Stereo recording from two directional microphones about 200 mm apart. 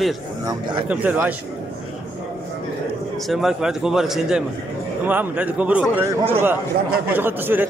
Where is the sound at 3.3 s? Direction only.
Centre (ahead or behind).